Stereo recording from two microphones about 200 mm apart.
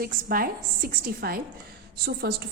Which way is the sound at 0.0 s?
45° right (ahead or behind).